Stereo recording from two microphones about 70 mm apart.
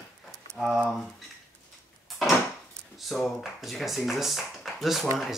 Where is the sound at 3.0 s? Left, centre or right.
Centre.